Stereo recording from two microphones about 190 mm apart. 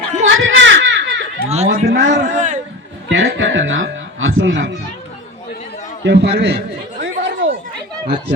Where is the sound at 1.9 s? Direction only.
90° right.